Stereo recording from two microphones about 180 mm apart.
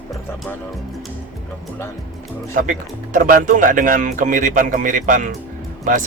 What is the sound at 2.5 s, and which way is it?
Speech, 50° right (ahead or behind).